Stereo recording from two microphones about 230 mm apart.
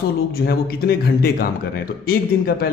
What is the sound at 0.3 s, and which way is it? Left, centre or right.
A man's voice, left.